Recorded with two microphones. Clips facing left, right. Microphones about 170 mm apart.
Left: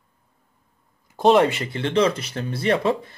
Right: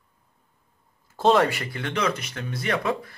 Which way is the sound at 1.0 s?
20° left (ahead or behind).